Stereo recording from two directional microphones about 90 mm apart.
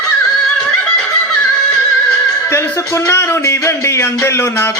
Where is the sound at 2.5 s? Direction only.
30° left (ahead or behind).